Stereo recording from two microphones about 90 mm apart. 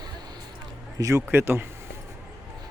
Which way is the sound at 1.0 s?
35° right (ahead or behind).